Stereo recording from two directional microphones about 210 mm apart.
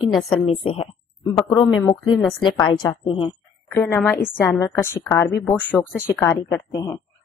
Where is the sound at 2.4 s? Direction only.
20° left (ahead or behind).